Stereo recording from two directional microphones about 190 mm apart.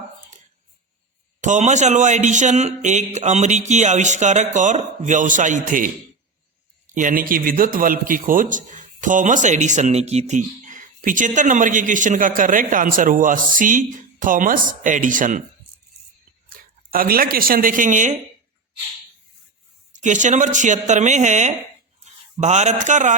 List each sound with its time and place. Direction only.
1.4 s speech: 40° right (ahead or behind)
6.9 s a man's voice: 45° right (ahead or behind)
16.5 s speech: 50° right (ahead or behind)
20.0 s speech: 40° right (ahead or behind)